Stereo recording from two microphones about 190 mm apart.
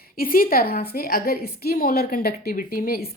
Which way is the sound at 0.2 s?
50° left (ahead or behind).